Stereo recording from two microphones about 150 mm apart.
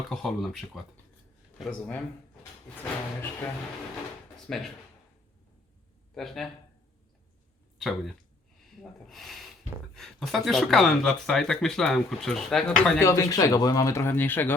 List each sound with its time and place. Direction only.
0.1 s speech: centre (ahead or behind)
4.4 s speech: 5° left (ahead or behind)
6.1 s speech: centre (ahead or behind)
7.8 s speech: centre (ahead or behind)
13.0 s speech: 20° left (ahead or behind)